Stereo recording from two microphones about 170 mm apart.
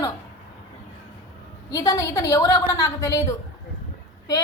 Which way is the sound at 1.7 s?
20° left (ahead or behind).